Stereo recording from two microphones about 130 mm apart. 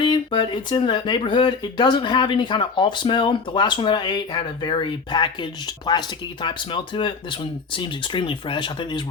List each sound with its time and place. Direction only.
0.0 s speech: 35° left (ahead or behind)